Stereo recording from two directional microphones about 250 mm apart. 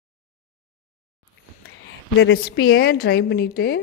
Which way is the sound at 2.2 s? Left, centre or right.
Left.